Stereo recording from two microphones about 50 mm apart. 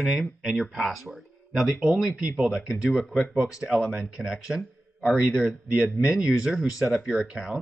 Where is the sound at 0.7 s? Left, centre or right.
Centre.